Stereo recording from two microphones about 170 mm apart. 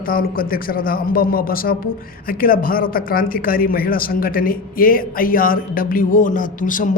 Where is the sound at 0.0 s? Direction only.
55° left (ahead or behind).